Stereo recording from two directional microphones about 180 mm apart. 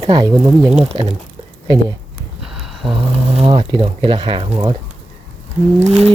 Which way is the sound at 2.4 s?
Centre (ahead or behind).